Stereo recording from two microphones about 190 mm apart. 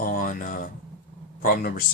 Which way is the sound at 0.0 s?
50° left (ahead or behind).